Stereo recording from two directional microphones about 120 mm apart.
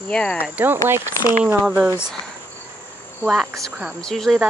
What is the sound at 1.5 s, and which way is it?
Speech, 15° right (ahead or behind).